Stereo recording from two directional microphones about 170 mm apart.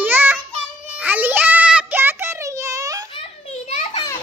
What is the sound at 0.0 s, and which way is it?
Child singing, 10° right (ahead or behind).